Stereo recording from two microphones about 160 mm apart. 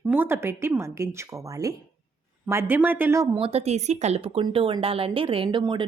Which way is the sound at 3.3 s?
35° right (ahead or behind).